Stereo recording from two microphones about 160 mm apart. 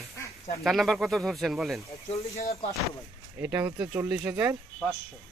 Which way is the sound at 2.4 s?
40° left (ahead or behind).